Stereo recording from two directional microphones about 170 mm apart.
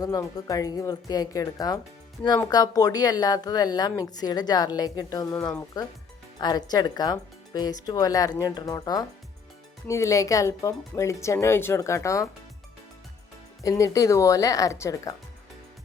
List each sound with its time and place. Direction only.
0.0 s speech: 20° left (ahead or behind)
13.6 s speech: 20° left (ahead or behind)